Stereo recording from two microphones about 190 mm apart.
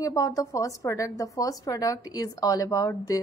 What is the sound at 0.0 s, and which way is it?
Speech, 20° left (ahead or behind).